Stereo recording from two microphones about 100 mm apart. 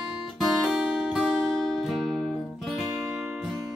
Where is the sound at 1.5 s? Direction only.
5° left (ahead or behind).